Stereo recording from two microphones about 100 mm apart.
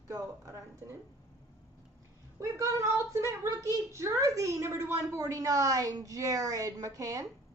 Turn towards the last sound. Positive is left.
turn(degrees=-35)  # may be behind; listen again after turning